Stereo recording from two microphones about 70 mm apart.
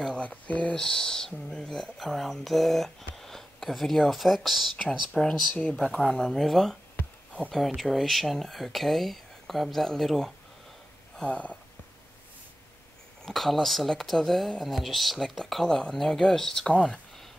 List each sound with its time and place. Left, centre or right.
0.0 s speech: centre
11.2 s a sound: centre
13.2 s speech: centre